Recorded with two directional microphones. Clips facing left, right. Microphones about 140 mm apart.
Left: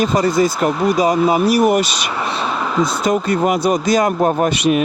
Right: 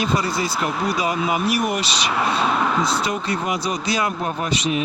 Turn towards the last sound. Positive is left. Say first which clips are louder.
# left 7 dB
turn(degrees=60)  # may be behind; listen again after turning